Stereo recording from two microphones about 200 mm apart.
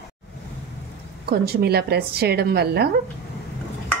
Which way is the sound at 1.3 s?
50° right (ahead or behind).